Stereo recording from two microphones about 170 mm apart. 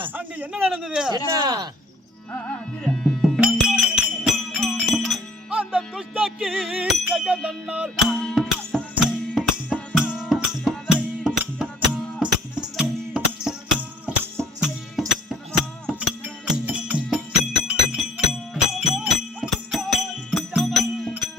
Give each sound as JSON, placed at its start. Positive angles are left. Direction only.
{"t": 0.1, "sound": "a man's voice", "side_deg": -10}
{"t": 1.3, "sound": "speech", "side_deg": -20}
{"t": 2.8, "sound": "music", "side_deg": 5}